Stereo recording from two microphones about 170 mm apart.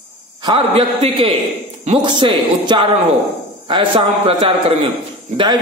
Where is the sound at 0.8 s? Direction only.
35° right (ahead or behind).